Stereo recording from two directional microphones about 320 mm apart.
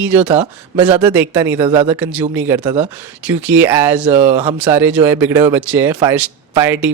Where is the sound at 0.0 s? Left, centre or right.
Centre.